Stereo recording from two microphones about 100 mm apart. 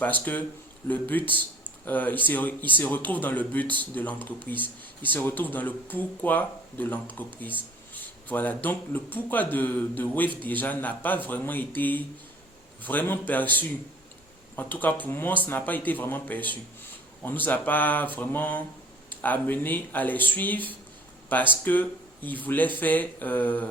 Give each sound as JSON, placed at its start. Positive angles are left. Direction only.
{"t": 0.0, "sound": "speech", "side_deg": 15}